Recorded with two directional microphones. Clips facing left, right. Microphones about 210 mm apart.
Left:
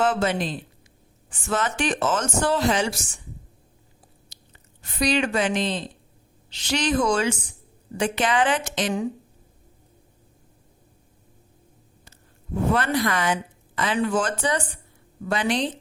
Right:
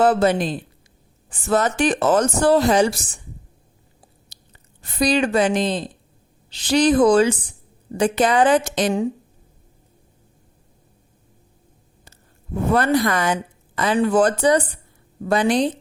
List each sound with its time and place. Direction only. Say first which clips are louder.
0.0 s a woman's voice: right 6 dB; 35° right (ahead or behind)
4.3 s a woman's voice: even; 35° right (ahead or behind)
12.7 s a woman's voice: right 6 dB; 40° right (ahead or behind)